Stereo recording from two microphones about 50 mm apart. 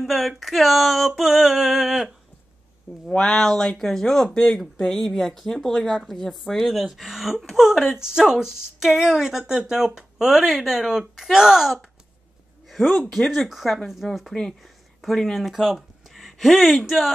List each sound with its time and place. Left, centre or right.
0.0 s a woman's voice: centre
3.1 s a woman's voice: centre
13.1 s a woman's voice: centre
14.3 s speech: centre
15.0 s speech: centre